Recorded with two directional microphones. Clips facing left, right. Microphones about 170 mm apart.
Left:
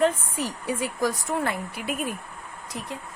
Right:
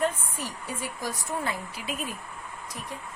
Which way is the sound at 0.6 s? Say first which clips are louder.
Left 9 dB; 75° left (ahead or behind).